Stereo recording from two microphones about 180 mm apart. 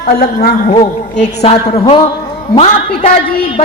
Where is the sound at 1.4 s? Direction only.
35° left (ahead or behind).